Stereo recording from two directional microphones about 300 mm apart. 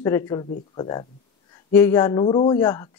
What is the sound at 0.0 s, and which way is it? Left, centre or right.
Speech, centre.